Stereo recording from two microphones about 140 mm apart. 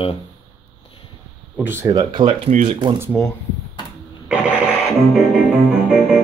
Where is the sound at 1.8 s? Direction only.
30° right (ahead or behind).